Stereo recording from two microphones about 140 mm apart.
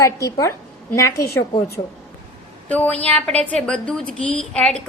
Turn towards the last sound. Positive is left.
turn(degrees=5)  # may be behind; listen again after turning